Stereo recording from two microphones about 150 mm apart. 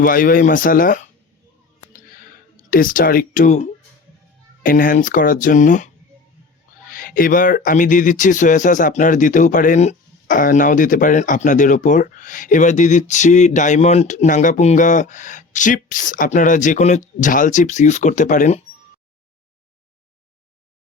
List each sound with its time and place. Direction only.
0.0 s speech: 70° left (ahead or behind)
2.6 s speech: 65° left (ahead or behind)
4.6 s speech: 70° left (ahead or behind)